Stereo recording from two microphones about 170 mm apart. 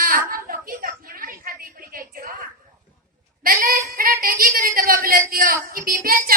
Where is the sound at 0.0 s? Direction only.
55° right (ahead or behind).